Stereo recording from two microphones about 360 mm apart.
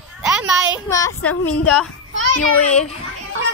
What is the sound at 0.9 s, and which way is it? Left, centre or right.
A woman's voice, centre.